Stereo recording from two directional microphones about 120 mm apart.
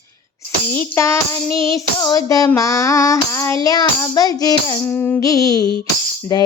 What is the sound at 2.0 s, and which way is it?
Child singing, 30° left (ahead or behind).